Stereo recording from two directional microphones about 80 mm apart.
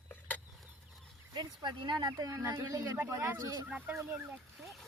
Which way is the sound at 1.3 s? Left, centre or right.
Right.